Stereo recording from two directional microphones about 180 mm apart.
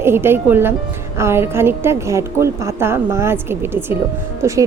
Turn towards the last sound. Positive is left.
turn(degrees=-15)  # may be behind; listen again after turning